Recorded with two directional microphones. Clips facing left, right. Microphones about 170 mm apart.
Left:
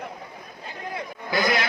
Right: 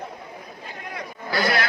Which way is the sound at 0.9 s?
20° left (ahead or behind).